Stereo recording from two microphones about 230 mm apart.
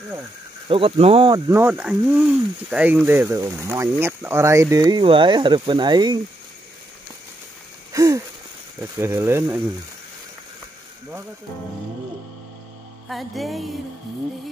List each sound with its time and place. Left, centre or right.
0.7 s speech: right
1.5 s speech: centre
7.9 s wheeze: centre
8.8 s speech: centre
13.1 s music: centre